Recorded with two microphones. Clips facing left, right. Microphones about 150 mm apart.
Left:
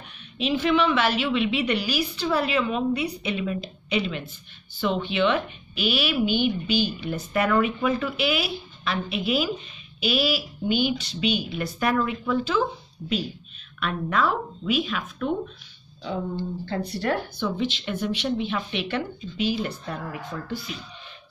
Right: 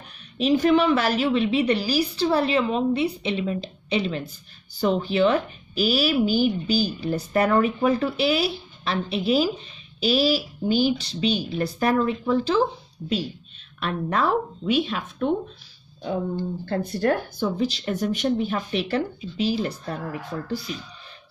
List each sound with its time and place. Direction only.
0.4 s speech: 40° right (ahead or behind)
13.7 s speech: 30° right (ahead or behind)
16.0 s speech: 50° right (ahead or behind)